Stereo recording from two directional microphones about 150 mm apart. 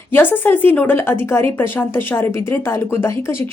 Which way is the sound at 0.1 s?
15° left (ahead or behind).